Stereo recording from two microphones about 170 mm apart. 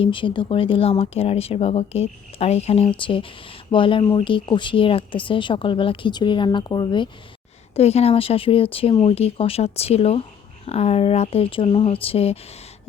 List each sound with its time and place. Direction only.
0.0 s speech: 30° left (ahead or behind)
7.8 s speech: 35° left (ahead or behind)